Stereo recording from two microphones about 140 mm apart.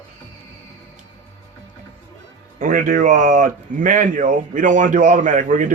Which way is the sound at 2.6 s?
75° right (ahead or behind).